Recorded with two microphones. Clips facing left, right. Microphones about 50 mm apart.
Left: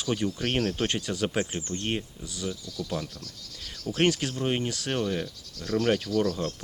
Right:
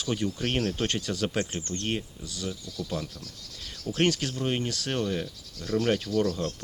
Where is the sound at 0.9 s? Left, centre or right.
Centre.